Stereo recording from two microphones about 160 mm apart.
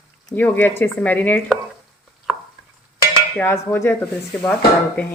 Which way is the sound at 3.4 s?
15° left (ahead or behind).